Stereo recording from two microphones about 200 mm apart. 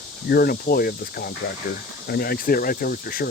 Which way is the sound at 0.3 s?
50° left (ahead or behind).